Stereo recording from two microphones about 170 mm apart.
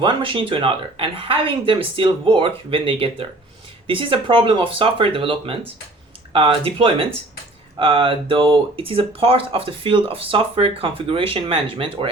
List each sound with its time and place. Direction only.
0.0 s speech: 30° right (ahead or behind)